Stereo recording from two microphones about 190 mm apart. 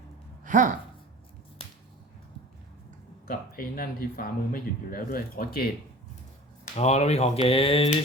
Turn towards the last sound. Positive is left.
turn(degrees=30)  # may be behind; listen again after turning